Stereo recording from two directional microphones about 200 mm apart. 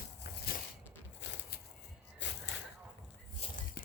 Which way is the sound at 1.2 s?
60° left (ahead or behind).